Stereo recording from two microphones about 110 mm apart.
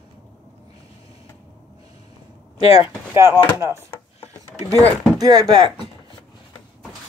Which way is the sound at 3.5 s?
25° right (ahead or behind).